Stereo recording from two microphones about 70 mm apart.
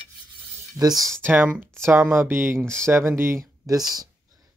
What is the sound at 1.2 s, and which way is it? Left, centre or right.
Speech, right.